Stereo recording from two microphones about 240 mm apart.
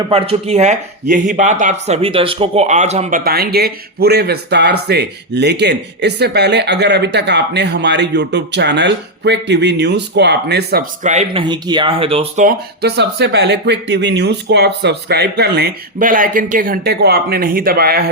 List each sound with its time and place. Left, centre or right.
0.1 s speech: right